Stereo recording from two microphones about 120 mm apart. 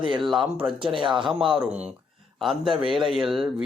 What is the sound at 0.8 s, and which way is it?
Speech, 45° right (ahead or behind).